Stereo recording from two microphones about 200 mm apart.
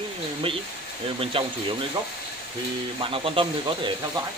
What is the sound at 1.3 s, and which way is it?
Speech, 25° right (ahead or behind).